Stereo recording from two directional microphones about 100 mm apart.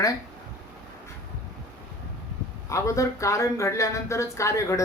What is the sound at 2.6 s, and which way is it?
Speech, 30° left (ahead or behind).